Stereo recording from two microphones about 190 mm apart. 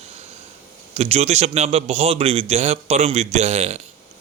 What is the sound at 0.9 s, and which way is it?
A man's voice, 35° right (ahead or behind).